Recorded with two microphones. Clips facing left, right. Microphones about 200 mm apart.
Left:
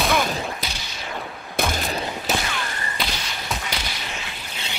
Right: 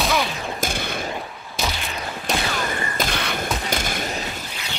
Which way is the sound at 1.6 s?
45° left (ahead or behind).